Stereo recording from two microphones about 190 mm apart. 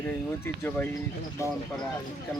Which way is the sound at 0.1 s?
10° left (ahead or behind).